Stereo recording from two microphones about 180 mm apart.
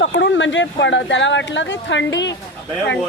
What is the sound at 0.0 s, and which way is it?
Speech, 80° left.